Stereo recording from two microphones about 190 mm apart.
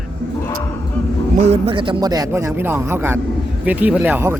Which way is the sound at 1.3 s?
35° right (ahead or behind).